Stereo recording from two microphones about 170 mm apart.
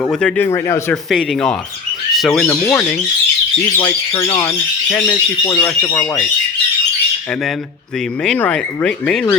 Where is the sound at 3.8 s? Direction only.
25° left (ahead or behind).